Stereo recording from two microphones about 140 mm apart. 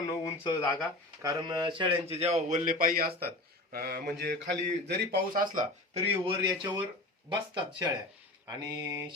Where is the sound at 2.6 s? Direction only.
90° right.